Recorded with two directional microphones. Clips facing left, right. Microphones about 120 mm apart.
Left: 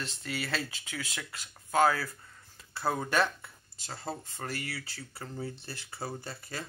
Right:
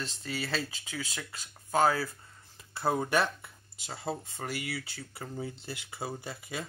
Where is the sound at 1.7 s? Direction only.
20° right (ahead or behind).